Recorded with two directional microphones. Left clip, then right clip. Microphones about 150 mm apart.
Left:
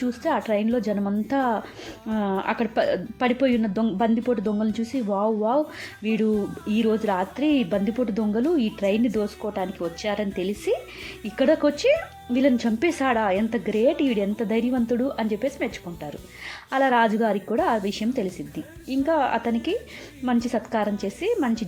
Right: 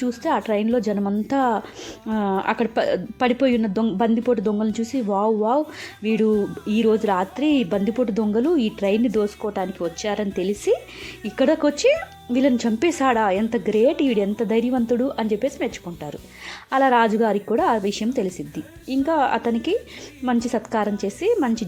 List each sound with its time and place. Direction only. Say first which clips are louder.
0.0 s speech: right 2 dB; 30° right (ahead or behind)
16.7 s speech: right 3 dB; 30° right (ahead or behind)